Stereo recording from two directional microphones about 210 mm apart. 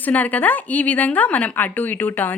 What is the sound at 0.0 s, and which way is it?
Speech, 10° left (ahead or behind).